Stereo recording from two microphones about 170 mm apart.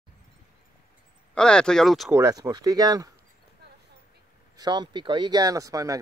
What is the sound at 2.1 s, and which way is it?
Speech, 20° right (ahead or behind).